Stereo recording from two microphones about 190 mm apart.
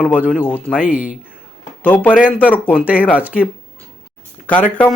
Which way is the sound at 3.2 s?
5° right (ahead or behind).